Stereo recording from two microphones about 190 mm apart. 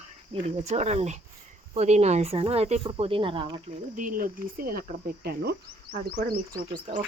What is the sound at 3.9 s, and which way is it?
Speech, 45° right (ahead or behind).